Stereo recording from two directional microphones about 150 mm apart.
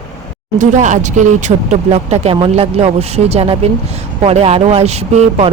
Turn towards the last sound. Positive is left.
turn(degrees=-45)  # may be behind; listen again after turning